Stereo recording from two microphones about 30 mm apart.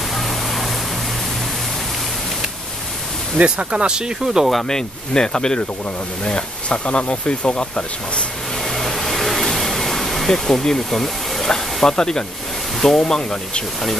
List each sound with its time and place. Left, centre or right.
0.1 s a sound: centre
3.3 s speech: right
4.6 s speech: left
8.6 s vehicle: centre
10.8 s speech: centre
11.4 s speech: centre